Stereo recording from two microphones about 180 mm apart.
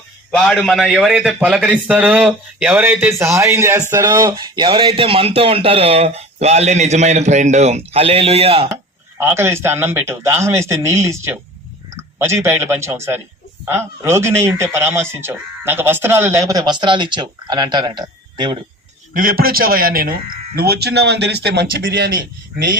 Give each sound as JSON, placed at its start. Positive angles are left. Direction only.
{"t": 0.3, "sound": "a man's voice", "side_deg": 5}
{"t": 8.7, "sound": "speech", "side_deg": -15}
{"t": 19.1, "sound": "a man's voice", "side_deg": -55}